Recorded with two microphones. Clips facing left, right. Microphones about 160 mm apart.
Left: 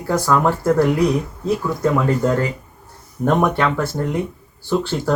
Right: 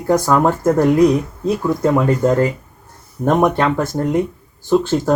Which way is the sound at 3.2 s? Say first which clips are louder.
Right 3 dB; 15° right (ahead or behind).